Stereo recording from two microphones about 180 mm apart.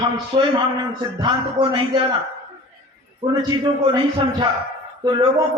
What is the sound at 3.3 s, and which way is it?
Speech, 25° right (ahead or behind).